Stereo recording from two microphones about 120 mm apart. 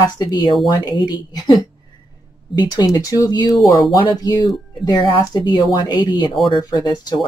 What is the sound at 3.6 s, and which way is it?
Speech, centre (ahead or behind).